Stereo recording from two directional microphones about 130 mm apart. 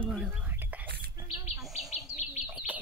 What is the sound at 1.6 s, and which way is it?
Bird, centre (ahead or behind).